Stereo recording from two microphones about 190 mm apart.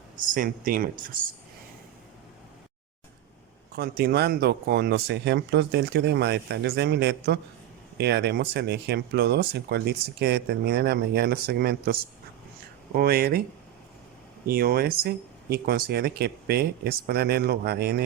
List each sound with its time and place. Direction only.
0.3 s speech: 45° right (ahead or behind)
3.8 s speech: 55° right (ahead or behind)
14.4 s speech: 55° right (ahead or behind)